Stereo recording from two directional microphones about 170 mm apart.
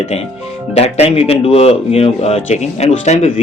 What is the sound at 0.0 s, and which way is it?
Speech, 35° left (ahead or behind).